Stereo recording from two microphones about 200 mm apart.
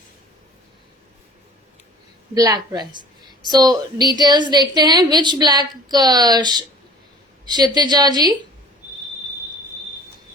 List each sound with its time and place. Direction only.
2.3 s a woman's voice: 20° right (ahead or behind)